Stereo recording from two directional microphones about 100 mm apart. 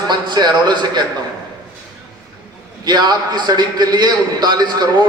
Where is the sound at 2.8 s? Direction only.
45° right (ahead or behind).